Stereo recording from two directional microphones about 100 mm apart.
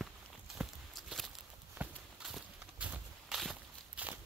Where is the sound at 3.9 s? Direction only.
15° right (ahead or behind).